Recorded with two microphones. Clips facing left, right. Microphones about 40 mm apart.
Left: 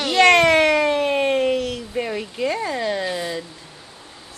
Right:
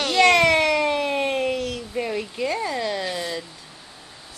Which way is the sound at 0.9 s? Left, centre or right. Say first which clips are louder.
Left 4 dB; left.